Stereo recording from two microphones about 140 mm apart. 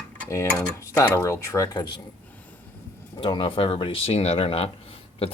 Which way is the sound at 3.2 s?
35° left (ahead or behind).